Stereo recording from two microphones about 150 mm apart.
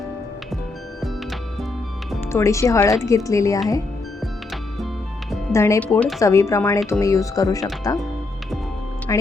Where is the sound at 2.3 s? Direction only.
20° left (ahead or behind).